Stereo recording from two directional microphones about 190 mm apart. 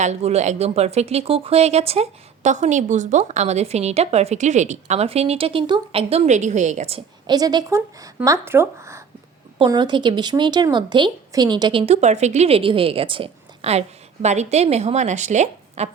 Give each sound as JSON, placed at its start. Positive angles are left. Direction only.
{"t": 0.0, "sound": "speech", "side_deg": -35}